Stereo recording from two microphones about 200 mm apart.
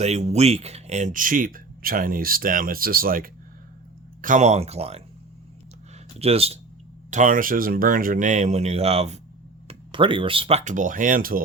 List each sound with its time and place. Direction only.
0.0 s speech: 35° right (ahead or behind)
6.1 s speech: 30° right (ahead or behind); by 11.4 s 45° right (ahead or behind)